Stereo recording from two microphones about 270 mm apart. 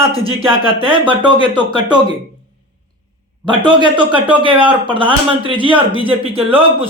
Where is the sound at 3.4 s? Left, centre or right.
Centre.